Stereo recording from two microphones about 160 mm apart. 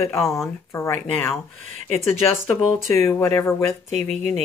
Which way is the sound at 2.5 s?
15° left (ahead or behind).